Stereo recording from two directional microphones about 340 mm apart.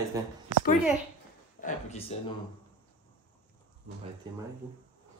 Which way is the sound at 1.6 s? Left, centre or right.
Centre.